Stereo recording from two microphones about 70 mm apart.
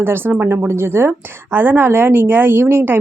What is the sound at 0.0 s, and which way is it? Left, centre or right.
A woman's voice, right.